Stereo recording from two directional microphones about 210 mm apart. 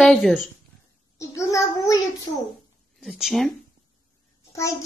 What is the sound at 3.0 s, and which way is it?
Speech, centre (ahead or behind).